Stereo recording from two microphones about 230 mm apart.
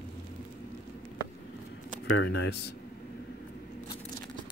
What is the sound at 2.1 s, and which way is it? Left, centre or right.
Speech, left.